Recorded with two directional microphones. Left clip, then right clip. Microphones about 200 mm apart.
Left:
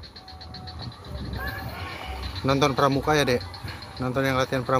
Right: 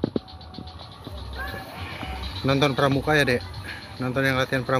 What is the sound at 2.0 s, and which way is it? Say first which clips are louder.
Speech: right 4 dB; 5° left (ahead or behind).